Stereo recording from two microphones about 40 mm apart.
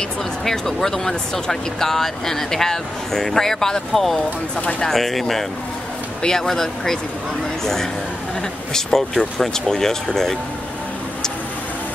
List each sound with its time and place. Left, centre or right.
0.5 s speech: centre
4.6 s speech: left
4.8 s speech: centre
6.2 s speech: centre